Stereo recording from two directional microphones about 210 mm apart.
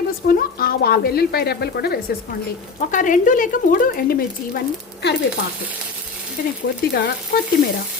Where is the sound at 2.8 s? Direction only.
40° left (ahead or behind).